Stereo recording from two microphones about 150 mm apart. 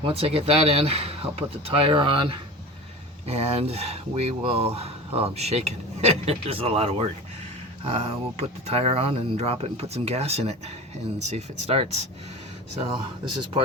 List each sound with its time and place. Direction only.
0.0 s speech: 40° right (ahead or behind)
3.2 s speech: 45° right (ahead or behind)